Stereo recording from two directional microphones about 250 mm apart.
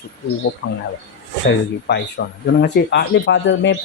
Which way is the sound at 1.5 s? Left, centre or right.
Left.